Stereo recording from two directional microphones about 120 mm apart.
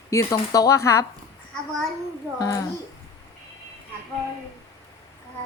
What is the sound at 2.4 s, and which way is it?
Speech, 30° left (ahead or behind).